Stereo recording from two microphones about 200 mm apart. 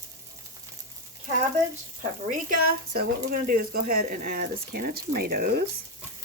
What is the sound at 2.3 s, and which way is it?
Speech, 40° right (ahead or behind).